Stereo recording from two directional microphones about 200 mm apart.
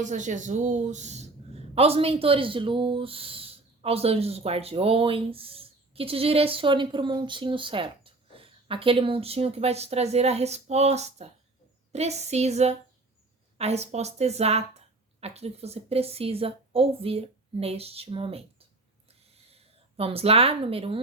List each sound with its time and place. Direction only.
0.0 s a woman's voice: 40° right (ahead or behind)
19.5 s speech: 30° right (ahead or behind)